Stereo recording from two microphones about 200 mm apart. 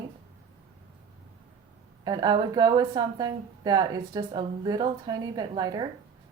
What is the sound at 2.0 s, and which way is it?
A woman's voice, 20° right (ahead or behind).